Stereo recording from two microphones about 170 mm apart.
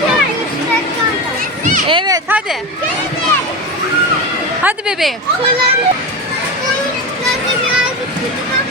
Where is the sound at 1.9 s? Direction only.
25° right (ahead or behind).